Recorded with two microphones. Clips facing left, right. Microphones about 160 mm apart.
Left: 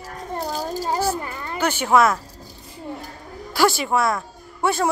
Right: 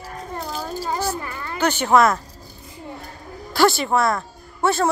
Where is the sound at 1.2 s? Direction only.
25° left (ahead or behind).